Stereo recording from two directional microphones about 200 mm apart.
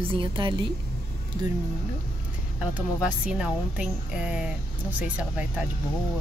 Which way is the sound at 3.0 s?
5° right (ahead or behind).